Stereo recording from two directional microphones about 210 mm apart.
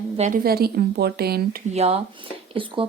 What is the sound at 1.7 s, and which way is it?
Speech, 30° right (ahead or behind).